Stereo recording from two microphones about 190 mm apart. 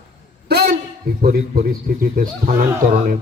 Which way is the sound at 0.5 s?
60° right (ahead or behind).